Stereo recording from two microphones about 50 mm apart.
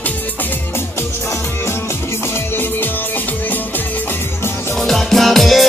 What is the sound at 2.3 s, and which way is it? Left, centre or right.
Music, left.